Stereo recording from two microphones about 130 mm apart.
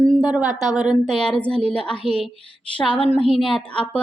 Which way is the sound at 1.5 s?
50° right (ahead or behind).